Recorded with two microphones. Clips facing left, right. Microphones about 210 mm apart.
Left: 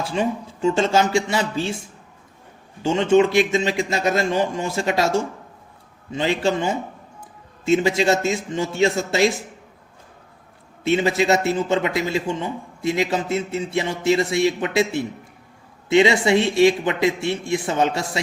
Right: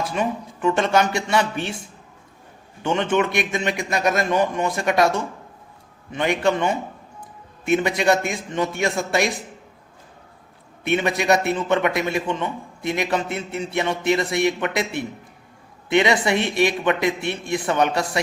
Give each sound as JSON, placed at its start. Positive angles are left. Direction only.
{"t": 0.0, "sound": "speech", "side_deg": 25}
{"t": 2.8, "sound": "speech", "side_deg": 25}
{"t": 6.1, "sound": "speech", "side_deg": 25}
{"t": 10.9, "sound": "speech", "side_deg": 25}